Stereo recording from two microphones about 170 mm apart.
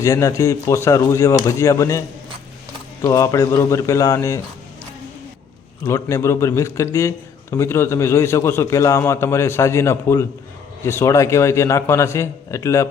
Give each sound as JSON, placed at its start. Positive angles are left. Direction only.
{"t": 0.0, "sound": "a man's voice", "side_deg": 20}
{"t": 5.8, "sound": "a man's voice", "side_deg": 20}